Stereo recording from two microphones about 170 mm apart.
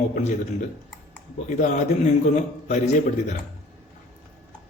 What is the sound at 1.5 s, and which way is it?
Speech, 45° left (ahead or behind).